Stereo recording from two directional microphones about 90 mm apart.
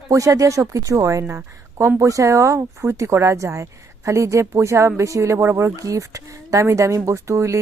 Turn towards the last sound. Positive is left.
turn(degrees=-35)  # may be behind; listen again after turning